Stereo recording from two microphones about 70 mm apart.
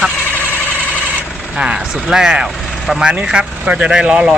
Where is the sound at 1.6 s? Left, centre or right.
Centre.